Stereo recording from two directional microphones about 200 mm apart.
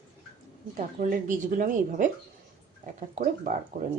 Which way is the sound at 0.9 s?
40° right (ahead or behind).